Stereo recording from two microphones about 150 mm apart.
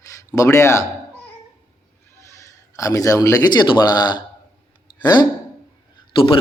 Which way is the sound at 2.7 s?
20° left (ahead or behind).